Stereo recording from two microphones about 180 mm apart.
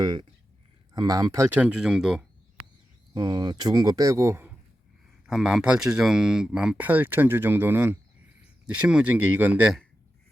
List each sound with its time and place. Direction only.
0.0 s speech: 25° right (ahead or behind); by 2.2 s 5° right (ahead or behind)
3.2 s speech: 20° right (ahead or behind)
5.2 s speech: 5° right (ahead or behind)